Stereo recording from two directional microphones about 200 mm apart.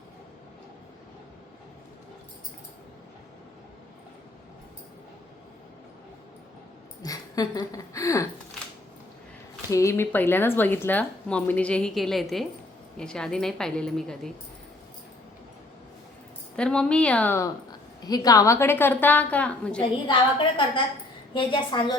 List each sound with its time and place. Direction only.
7.0 s speech: 20° left (ahead or behind)
9.6 s a woman's voice: 15° left (ahead or behind)
16.6 s a woman's voice: 5° left (ahead or behind)
20.1 s a woman's voice: 25° left (ahead or behind)